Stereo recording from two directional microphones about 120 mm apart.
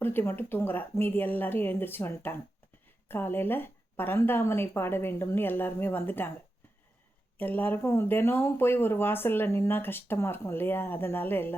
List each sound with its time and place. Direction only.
0.0 s speech: 15° left (ahead or behind)
7.3 s speech: 15° left (ahead or behind)